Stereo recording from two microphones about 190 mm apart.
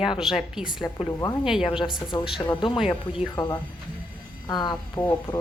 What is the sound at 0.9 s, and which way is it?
Speech, 25° left (ahead or behind).